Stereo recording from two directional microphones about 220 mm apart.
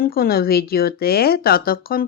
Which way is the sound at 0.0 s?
45° left (ahead or behind).